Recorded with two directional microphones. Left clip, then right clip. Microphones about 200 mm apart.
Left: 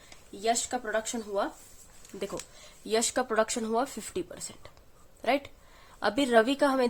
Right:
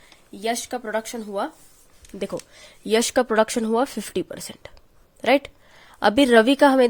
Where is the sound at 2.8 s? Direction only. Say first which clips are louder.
Right 8 dB; 40° right (ahead or behind).